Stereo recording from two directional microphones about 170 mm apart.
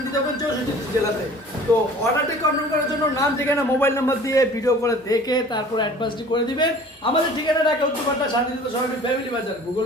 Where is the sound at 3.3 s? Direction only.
15° left (ahead or behind).